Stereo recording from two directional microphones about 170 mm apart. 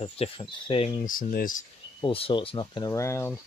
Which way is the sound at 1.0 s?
55° left (ahead or behind).